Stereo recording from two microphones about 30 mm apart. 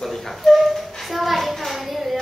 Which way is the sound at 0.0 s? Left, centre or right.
Centre.